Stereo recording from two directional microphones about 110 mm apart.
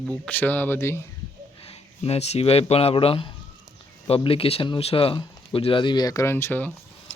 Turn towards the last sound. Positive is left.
turn(degrees=15)  # may be behind; listen again after turning